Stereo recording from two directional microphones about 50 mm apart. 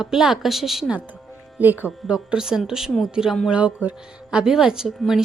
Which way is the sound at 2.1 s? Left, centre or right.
Centre.